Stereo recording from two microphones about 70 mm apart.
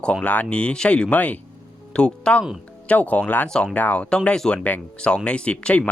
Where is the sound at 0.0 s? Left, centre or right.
Centre.